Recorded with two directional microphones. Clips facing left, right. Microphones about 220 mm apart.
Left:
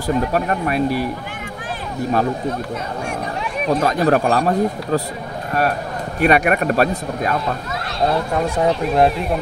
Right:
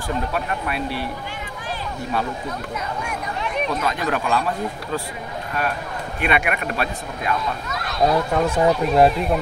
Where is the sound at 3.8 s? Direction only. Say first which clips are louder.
Left 7 dB; 40° left (ahead or behind).